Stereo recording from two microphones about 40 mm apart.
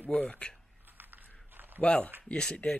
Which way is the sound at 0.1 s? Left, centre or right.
Left.